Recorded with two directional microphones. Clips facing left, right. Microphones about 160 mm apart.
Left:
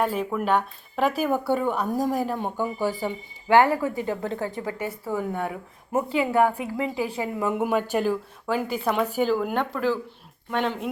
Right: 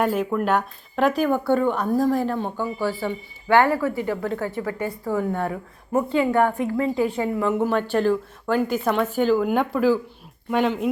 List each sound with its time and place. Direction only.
0.0 s speech: centre (ahead or behind); by 4.9 s 20° left (ahead or behind)
4.9 s a woman's voice: 5° left (ahead or behind)